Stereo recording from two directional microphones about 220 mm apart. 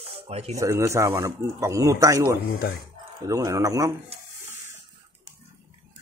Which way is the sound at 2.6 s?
45° left (ahead or behind).